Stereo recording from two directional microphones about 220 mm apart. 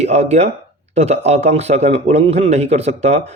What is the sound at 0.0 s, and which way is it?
A man's voice, 30° right (ahead or behind).